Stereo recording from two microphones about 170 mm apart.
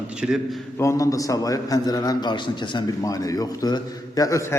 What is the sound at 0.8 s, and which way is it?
A man's voice, 20° left (ahead or behind).